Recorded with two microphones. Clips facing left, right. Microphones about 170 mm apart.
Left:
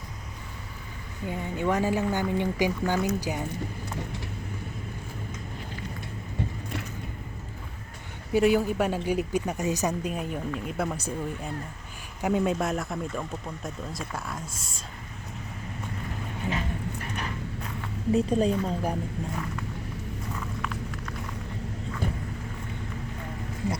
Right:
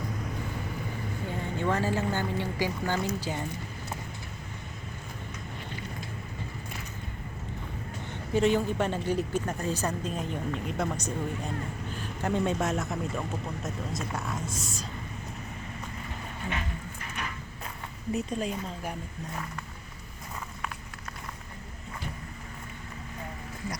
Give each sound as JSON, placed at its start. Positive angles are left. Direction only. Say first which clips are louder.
{"t": 1.3, "sound": "a woman's voice", "louder": "left 3 dB", "side_deg": 15}
{"t": 8.3, "sound": "a woman's voice", "louder": "left 3 dB", "side_deg": 10}
{"t": 12.2, "sound": "speech", "louder": "left 3 dB", "side_deg": 5}
{"t": 18.1, "sound": "speech", "louder": "left 8 dB", "side_deg": 30}